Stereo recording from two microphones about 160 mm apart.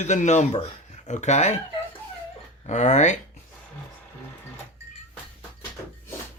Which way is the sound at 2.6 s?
45° left (ahead or behind).